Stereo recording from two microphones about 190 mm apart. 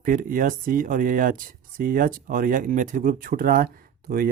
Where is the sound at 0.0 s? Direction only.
45° right (ahead or behind).